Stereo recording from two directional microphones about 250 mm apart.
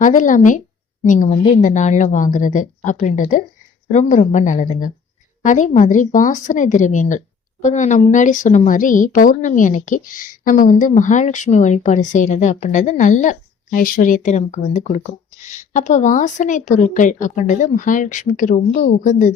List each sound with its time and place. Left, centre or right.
0.0 s speech: left